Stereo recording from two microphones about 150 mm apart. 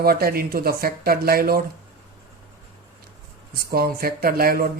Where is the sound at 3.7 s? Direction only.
85° right.